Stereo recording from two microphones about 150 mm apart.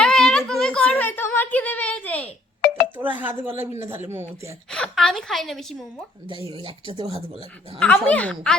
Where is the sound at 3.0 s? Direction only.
10° right (ahead or behind).